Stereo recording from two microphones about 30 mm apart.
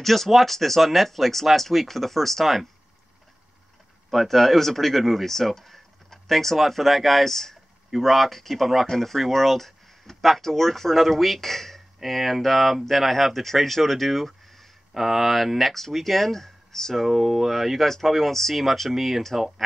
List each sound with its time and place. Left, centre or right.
0.0 s speech: centre
4.1 s speech: centre
15.0 s speech: centre
16.9 s speech: centre
17.5 s speech: centre